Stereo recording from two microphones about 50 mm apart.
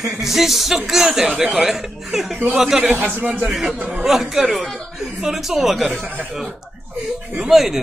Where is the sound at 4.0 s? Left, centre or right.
Centre.